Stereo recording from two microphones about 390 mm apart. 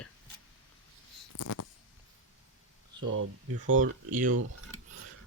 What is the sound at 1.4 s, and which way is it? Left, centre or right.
Speech, left.